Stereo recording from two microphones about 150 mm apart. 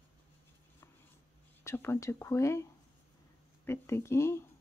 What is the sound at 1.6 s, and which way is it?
Speech, 15° left (ahead or behind).